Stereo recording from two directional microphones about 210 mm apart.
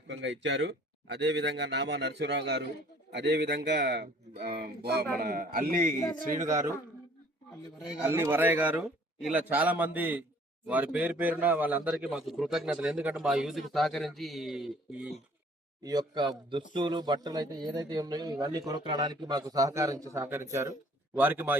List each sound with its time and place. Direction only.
0.1 s a man's voice: 55° right (ahead or behind); by 5.9 s 40° right (ahead or behind)
7.9 s a man's voice: 10° right (ahead or behind)
15.8 s a man's voice: 20° right (ahead or behind)